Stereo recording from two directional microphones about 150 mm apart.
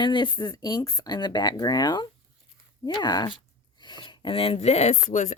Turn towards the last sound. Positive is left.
turn(degrees=50)  # may be behind; listen again after turning